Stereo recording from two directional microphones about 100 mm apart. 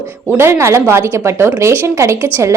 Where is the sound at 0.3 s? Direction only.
25° right (ahead or behind).